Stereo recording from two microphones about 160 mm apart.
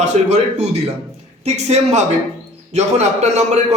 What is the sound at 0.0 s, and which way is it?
A man's voice, 45° right (ahead or behind).